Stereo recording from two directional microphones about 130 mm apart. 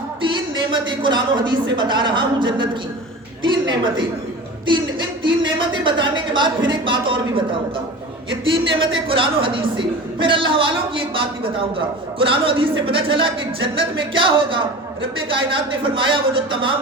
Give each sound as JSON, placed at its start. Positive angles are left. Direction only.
{"t": 0.3, "sound": "a woman's voice", "side_deg": -35}